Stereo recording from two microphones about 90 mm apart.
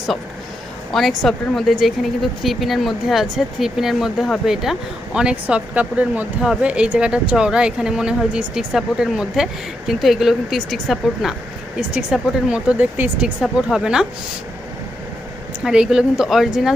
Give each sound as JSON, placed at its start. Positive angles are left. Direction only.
{"t": 0.9, "sound": "speech", "side_deg": 0}
{"t": 13.4, "sound": "speech", "side_deg": -5}
{"t": 15.6, "sound": "speech", "side_deg": -10}